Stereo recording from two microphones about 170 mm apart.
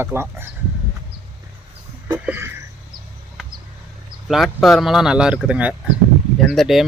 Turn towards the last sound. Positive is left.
turn(degrees=0)  # may be behind; listen again after turning